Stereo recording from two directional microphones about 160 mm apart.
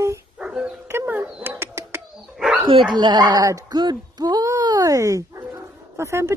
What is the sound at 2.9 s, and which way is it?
A woman's voice, 25° right (ahead or behind).